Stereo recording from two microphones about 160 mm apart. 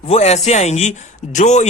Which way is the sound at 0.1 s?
40° left (ahead or behind).